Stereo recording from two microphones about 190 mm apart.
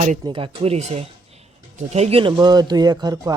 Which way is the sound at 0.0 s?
30° right (ahead or behind).